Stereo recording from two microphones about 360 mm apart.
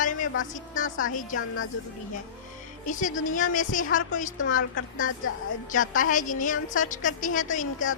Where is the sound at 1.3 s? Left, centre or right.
Left.